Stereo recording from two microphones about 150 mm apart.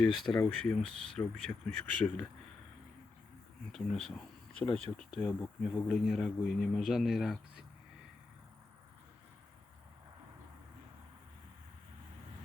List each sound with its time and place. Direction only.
0.4 s speech: 5° left (ahead or behind)
3.7 s speech: 5° left (ahead or behind)